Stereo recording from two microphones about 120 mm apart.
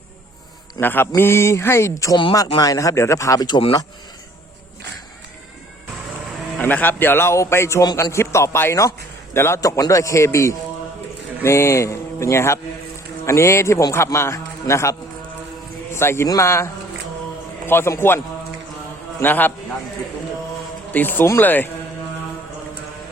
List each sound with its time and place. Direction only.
0.8 s a man's voice: 15° left (ahead or behind); by 3.6 s 35° left (ahead or behind)
6.6 s a man's voice: 15° left (ahead or behind)
19.2 s speech: 15° left (ahead or behind)
20.9 s speech: 15° left (ahead or behind)